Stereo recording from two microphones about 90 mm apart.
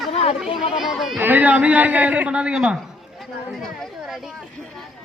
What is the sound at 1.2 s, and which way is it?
A man's voice, 20° right (ahead or behind).